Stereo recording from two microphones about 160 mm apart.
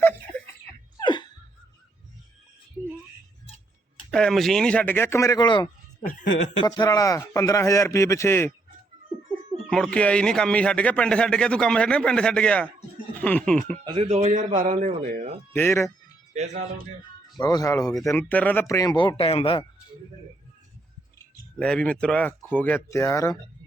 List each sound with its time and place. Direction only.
0.9 s laughter: 30° left (ahead or behind)
4.1 s speech: 5° left (ahead or behind); by 5.6 s 30° left (ahead or behind)
6.7 s speech: 20° left (ahead or behind)
9.1 s a sound: centre (ahead or behind)
9.6 s speech: 5° left (ahead or behind)
13.8 s a man's voice: 35° right (ahead or behind); by 15.4 s 55° right (ahead or behind)
15.5 s speech: 15° left (ahead or behind)
16.3 s a man's voice: 45° right (ahead or behind)
17.3 s speech: 25° left (ahead or behind)
17.8 s speech: centre (ahead or behind)
18.7 s speech: 20° left (ahead or behind)
21.6 s speech: 5° left (ahead or behind)